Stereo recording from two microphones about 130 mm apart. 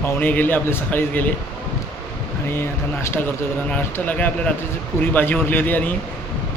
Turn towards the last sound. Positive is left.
turn(degrees=15)  # may be behind; listen again after turning